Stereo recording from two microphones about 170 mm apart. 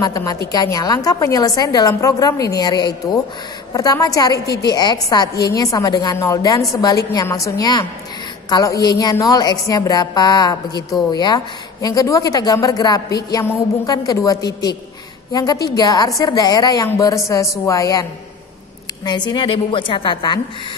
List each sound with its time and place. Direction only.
0.0 s a woman's voice: 20° left (ahead or behind)
19.0 s speech: 25° left (ahead or behind)